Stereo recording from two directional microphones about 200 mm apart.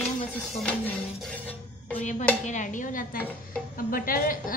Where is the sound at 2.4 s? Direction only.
40° left (ahead or behind).